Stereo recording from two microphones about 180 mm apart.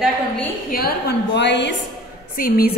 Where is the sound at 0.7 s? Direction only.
55° left (ahead or behind); by 1.8 s 80° left.